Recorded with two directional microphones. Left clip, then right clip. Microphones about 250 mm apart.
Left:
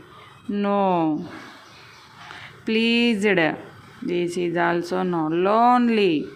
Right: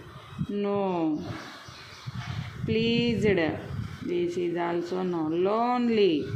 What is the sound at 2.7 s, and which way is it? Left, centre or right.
Speech, left.